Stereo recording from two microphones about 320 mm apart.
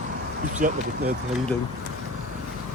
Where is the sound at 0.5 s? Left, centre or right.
Right.